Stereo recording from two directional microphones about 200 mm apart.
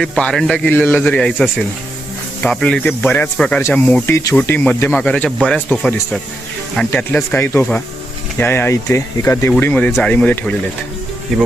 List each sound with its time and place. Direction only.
0.0 s speech: 5° left (ahead or behind)
6.7 s speech: 5° left (ahead or behind)